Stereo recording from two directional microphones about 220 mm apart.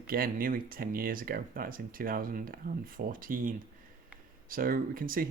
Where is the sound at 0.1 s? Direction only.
40° right (ahead or behind).